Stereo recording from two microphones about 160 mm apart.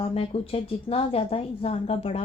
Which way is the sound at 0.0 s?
35° left (ahead or behind).